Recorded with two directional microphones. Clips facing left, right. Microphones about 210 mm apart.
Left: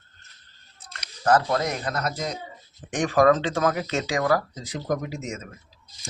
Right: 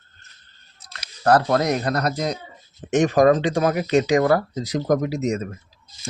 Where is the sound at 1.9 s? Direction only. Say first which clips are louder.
Right 6 dB; 35° right (ahead or behind).